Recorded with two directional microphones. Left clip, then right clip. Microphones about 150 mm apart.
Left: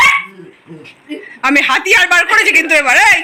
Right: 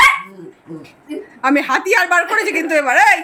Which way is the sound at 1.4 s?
5° right (ahead or behind).